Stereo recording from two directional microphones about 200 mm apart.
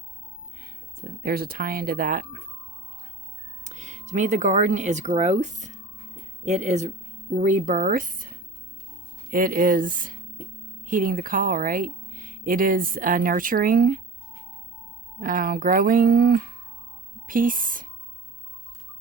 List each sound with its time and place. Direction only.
0.6 s speech: 45° right (ahead or behind)
3.7 s speech: 35° right (ahead or behind)
15.2 s speech: 45° right (ahead or behind)